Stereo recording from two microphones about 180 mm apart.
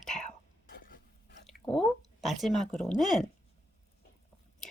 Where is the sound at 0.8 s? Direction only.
50° left (ahead or behind).